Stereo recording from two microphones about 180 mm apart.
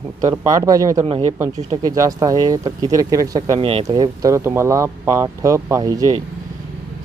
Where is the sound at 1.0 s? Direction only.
30° right (ahead or behind).